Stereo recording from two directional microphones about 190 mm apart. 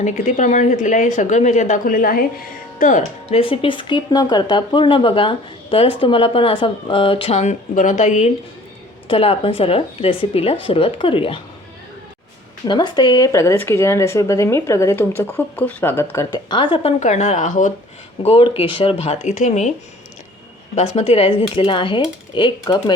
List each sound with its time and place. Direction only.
0.0 s speech: 40° left (ahead or behind)
3.2 s speech: 30° left (ahead or behind)
12.6 s speech: 25° left (ahead or behind)
17.0 s speech: 40° left (ahead or behind)
18.2 s speech: 30° left (ahead or behind)
20.7 s speech: 35° left (ahead or behind)